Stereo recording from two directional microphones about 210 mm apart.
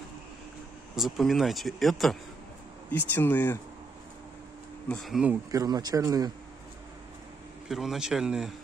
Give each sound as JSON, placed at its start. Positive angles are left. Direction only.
{"t": 0.9, "sound": "speech", "side_deg": 0}
{"t": 4.8, "sound": "speech", "side_deg": 0}
{"t": 5.5, "sound": "a man's voice", "side_deg": -20}
{"t": 7.6, "sound": "speech", "side_deg": 0}